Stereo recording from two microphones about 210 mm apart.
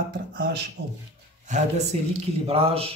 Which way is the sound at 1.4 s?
35° right (ahead or behind).